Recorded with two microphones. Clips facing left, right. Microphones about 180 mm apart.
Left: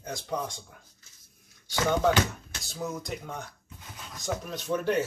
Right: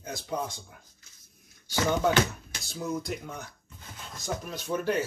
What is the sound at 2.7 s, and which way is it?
Speech, centre (ahead or behind).